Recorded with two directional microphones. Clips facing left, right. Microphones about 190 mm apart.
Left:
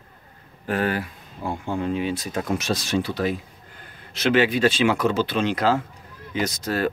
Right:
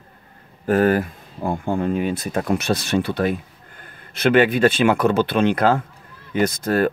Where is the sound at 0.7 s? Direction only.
45° right (ahead or behind).